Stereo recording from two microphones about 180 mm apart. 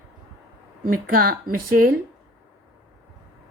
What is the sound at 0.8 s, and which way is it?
Speech, 50° right (ahead or behind).